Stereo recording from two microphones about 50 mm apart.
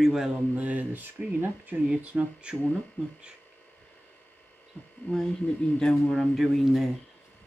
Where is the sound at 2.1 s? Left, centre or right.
Centre.